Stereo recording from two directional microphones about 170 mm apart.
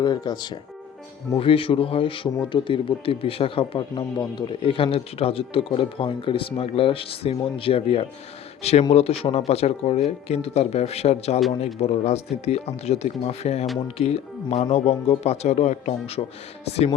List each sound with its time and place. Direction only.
0.0 s speech: 25° left (ahead or behind)